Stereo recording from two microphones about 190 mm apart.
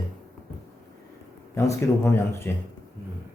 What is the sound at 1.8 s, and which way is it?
Speech, 15° left (ahead or behind).